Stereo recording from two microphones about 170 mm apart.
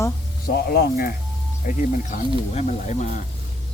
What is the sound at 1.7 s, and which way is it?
Speech, 45° left (ahead or behind).